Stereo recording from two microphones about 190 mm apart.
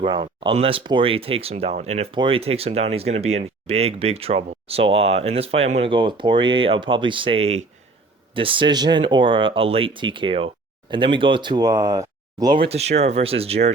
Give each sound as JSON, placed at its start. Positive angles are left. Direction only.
{"t": 0.0, "sound": "speech", "side_deg": -25}